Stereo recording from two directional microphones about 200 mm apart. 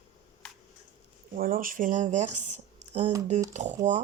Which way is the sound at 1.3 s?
45° right (ahead or behind).